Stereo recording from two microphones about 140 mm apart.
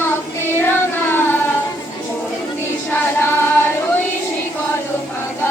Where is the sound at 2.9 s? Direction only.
15° left (ahead or behind).